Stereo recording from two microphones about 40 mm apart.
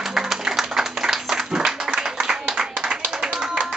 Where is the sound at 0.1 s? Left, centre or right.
Centre.